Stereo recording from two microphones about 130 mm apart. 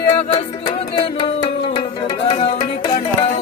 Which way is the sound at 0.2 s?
45° left (ahead or behind).